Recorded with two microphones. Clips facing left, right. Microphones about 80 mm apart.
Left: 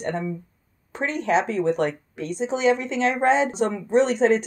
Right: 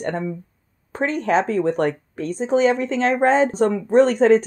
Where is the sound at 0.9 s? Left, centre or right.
Right.